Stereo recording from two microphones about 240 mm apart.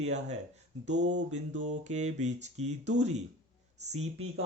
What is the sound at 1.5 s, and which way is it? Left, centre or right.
Mantra, right.